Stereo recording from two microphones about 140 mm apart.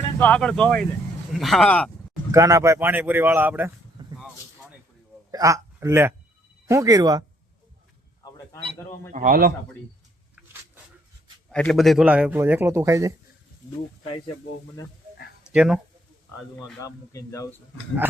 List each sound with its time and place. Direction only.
0.2 s speech: 10° left (ahead or behind)
2.3 s speech: 20° right (ahead or behind)
4.0 s a sound: 35° right (ahead or behind)
5.3 s a man's voice: 20° right (ahead or behind)
9.1 s a man's voice: 80° right
11.5 s speech: 5° left (ahead or behind)
12.0 s speech: 10° right (ahead or behind)
15.5 s speech: 5° right (ahead or behind)
16.8 s speech: 25° left (ahead or behind)